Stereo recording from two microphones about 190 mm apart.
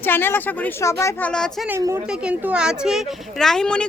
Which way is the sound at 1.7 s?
15° right (ahead or behind).